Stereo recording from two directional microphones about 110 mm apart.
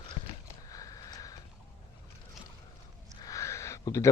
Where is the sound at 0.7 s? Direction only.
35° left (ahead or behind).